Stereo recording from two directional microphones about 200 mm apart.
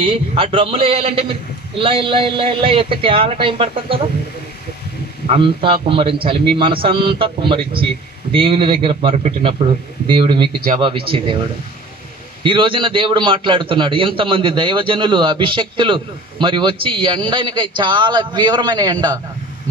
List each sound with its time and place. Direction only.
0.0 s a man's voice: 25° right (ahead or behind)
5.3 s a man's voice: 25° right (ahead or behind)
12.4 s a man's voice: 25° right (ahead or behind)